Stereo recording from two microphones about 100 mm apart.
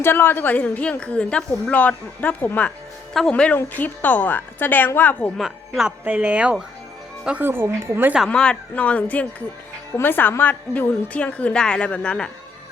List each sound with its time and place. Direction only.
0.0 s a woman's voice: 20° left (ahead or behind)
5.4 s a woman's voice: 5° right (ahead or behind); by 8.1 s 20° right (ahead or behind)
8.3 s a woman's voice: 10° left (ahead or behind)